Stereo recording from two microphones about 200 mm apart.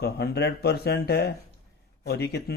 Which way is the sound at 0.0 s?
55° left (ahead or behind).